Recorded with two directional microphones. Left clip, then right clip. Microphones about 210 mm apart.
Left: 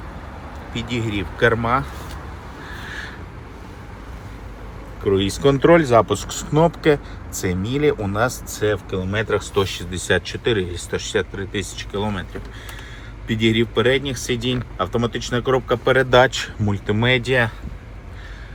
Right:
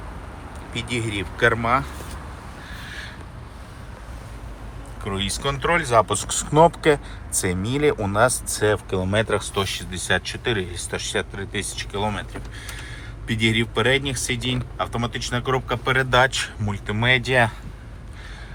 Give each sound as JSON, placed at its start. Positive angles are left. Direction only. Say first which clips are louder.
{"t": 0.7, "sound": "speech", "louder": "left 1 dB", "side_deg": 15}
{"t": 5.0, "sound": "speech", "louder": "left 8 dB", "side_deg": 25}
{"t": 6.3, "sound": "speech", "louder": "right 3 dB", "side_deg": 5}
{"t": 10.1, "sound": "speech", "louder": "left 3 dB", "side_deg": 15}
{"t": 13.2, "sound": "speech", "louder": "left 2 dB", "side_deg": 15}
{"t": 16.6, "sound": "speech", "louder": "left 4 dB", "side_deg": 15}